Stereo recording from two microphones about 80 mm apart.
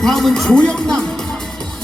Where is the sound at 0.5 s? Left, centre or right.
Centre.